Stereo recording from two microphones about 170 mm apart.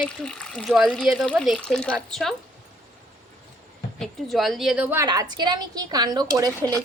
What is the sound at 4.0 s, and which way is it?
A woman's voice, centre (ahead or behind).